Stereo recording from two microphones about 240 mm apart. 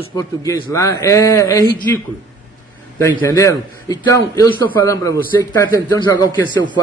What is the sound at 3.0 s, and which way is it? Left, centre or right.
A man's voice, centre.